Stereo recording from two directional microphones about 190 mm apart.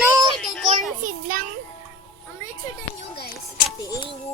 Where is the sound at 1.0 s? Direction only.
45° right (ahead or behind).